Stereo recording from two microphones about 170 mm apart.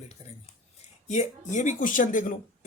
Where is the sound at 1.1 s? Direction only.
45° left (ahead or behind).